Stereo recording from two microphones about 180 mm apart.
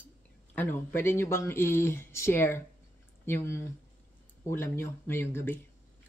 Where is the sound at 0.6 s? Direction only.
10° left (ahead or behind).